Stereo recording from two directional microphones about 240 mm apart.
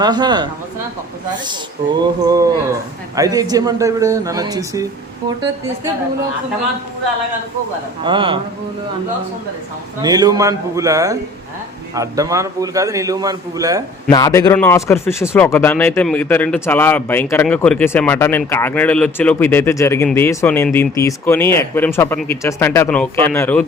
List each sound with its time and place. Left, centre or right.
0.0 s a man's voice: centre
1.5 s a man's voice: centre
8.0 s a man's voice: right
10.0 s a man's voice: centre
14.1 s speech: centre